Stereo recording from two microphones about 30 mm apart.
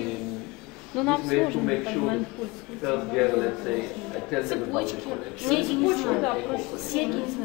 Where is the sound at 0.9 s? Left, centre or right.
Centre.